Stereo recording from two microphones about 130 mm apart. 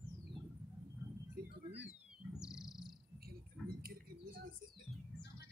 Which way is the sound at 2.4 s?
5° right (ahead or behind).